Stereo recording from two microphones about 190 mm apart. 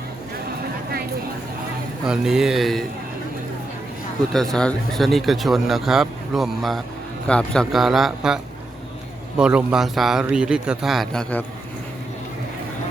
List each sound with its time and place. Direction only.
2.0 s speech: 5° right (ahead or behind)
4.3 s speech: centre (ahead or behind)
9.4 s speech: 5° right (ahead or behind)